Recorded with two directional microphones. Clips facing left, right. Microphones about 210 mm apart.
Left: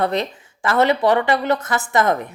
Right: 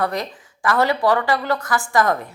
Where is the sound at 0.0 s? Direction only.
25° left (ahead or behind).